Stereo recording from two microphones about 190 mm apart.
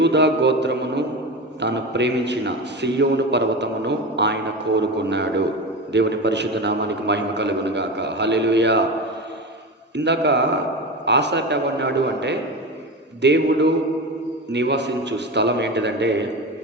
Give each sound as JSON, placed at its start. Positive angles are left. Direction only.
{"t": 0.0, "sound": "a man's voice", "side_deg": -65}
{"t": 9.9, "sound": "a man's voice", "side_deg": -65}